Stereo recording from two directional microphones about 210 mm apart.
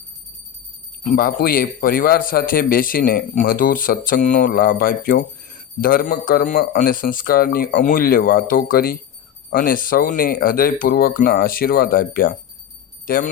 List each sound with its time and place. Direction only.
1.0 s a man's voice: 45° left (ahead or behind)